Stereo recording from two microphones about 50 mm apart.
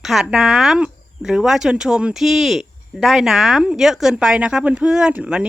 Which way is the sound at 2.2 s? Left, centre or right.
Centre.